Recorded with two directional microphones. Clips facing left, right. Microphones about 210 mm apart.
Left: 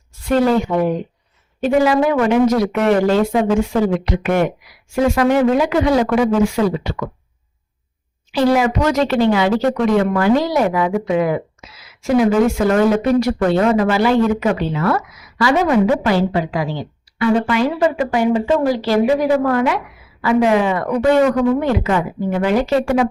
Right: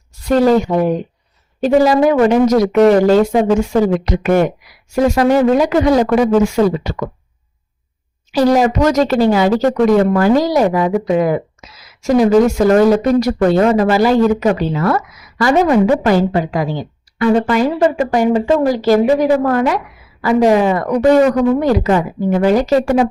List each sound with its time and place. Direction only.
0.1 s speech: 40° right (ahead or behind)
8.3 s speech: 40° right (ahead or behind)